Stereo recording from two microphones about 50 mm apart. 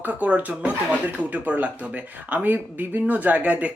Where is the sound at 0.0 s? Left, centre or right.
Right.